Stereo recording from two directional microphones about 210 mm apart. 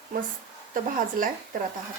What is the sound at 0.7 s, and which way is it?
Speech, 40° right (ahead or behind).